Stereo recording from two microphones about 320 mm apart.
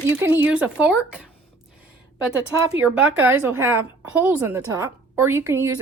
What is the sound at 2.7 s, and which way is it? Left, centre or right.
A woman's voice, centre.